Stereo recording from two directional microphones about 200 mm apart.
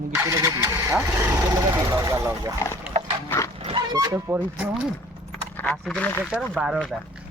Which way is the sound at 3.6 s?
20° right (ahead or behind).